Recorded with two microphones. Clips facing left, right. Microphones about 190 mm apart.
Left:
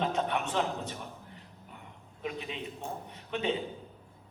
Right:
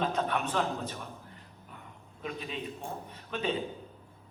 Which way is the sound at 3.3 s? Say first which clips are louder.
Left 1 dB; 20° left (ahead or behind).